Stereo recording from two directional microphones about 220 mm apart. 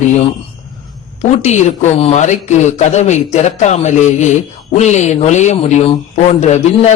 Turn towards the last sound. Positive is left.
turn(degrees=30)  # may be behind; listen again after turning